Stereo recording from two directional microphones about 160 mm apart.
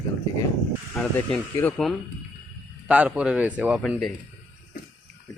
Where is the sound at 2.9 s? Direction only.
10° right (ahead or behind).